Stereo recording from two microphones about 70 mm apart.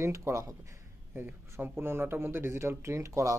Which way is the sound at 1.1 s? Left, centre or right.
Right.